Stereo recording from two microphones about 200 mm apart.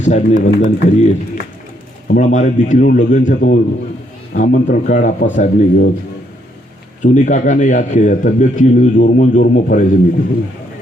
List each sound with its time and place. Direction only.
0.0 s a man's voice: 35° left (ahead or behind)
7.0 s a man's voice: 40° left (ahead or behind)